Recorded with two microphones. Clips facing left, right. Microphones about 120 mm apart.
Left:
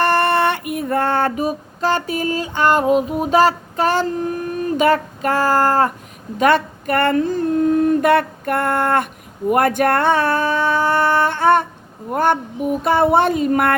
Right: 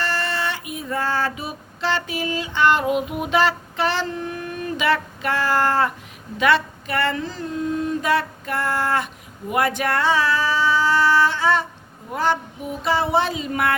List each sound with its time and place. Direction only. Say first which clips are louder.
0.0 s female singing: left 10 dB; 55° left (ahead or behind)
9.5 s a sound: left 6 dB; 50° left (ahead or behind)
12.1 s female singing: left 5 dB; 50° left (ahead or behind)